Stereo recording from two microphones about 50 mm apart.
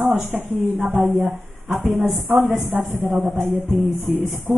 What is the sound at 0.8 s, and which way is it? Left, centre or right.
Speech, right.